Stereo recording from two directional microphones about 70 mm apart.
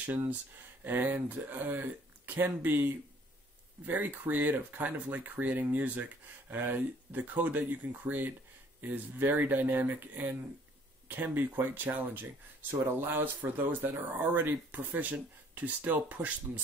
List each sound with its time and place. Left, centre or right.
0.0 s speech: right